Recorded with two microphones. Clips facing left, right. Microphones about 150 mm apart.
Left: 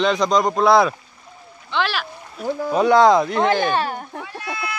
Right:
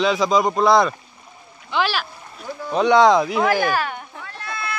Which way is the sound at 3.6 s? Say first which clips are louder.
Left 1 dB; 30° left (ahead or behind).